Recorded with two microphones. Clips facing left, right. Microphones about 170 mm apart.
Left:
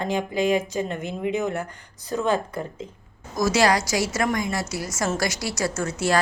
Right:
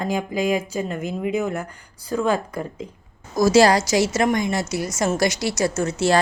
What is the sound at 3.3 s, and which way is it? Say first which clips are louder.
A woman's voice: right 5 dB; 30° right (ahead or behind).